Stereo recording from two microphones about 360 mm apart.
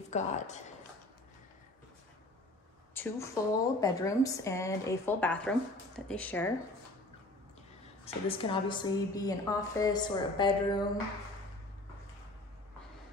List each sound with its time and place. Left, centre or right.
0.1 s speech: centre
2.9 s a woman's voice: centre
8.0 s a woman's voice: centre